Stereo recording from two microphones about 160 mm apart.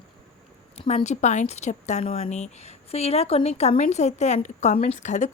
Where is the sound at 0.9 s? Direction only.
45° left (ahead or behind).